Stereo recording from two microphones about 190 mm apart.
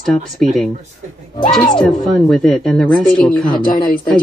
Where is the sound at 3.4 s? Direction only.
45° left (ahead or behind).